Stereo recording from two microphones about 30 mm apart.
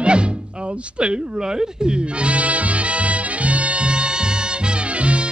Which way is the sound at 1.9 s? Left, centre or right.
Right.